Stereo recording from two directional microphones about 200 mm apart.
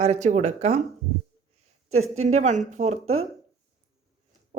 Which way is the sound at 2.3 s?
35° right (ahead or behind).